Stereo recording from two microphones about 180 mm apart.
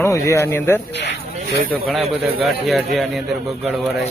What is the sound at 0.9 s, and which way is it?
Speech, 75° left (ahead or behind).